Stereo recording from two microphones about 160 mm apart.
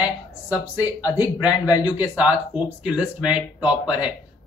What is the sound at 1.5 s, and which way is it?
Speech, 25° left (ahead or behind).